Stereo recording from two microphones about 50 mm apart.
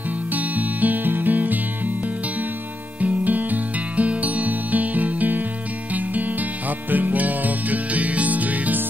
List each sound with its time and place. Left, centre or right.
0.3 s music: right
3.0 s music: right
6.9 s music: right